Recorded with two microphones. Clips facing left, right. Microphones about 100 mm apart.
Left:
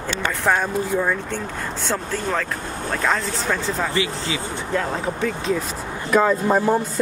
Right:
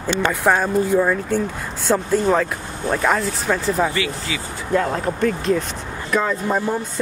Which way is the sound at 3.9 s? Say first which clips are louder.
Left 1 dB; 25° left (ahead or behind).